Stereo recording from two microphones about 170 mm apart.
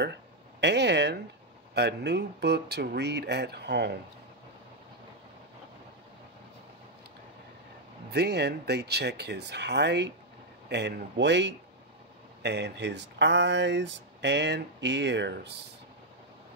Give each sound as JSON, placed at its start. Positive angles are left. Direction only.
{"t": 0.0, "sound": "speech", "side_deg": -85}
{"t": 8.1, "sound": "speech", "side_deg": -75}